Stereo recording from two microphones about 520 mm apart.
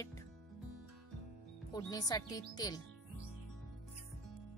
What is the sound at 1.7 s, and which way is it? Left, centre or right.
Speech, centre.